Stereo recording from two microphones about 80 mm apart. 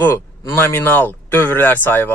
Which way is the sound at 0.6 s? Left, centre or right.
Left.